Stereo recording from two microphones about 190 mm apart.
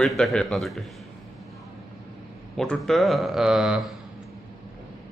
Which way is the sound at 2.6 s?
Centre (ahead or behind).